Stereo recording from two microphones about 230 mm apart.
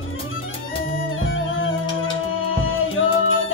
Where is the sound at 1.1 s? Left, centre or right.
Left.